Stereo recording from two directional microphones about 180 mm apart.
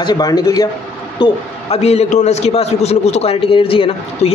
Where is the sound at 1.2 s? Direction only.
35° left (ahead or behind).